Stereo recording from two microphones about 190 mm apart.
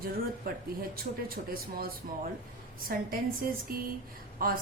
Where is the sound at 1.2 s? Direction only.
50° right (ahead or behind).